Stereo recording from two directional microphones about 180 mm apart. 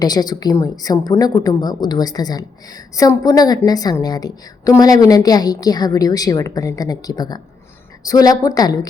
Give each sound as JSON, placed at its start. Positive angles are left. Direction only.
{"t": 0.0, "sound": "a woman's voice", "side_deg": 20}